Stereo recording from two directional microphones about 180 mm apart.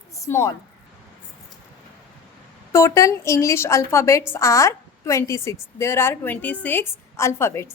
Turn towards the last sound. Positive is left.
turn(degrees=15)  # may be behind; listen again after turning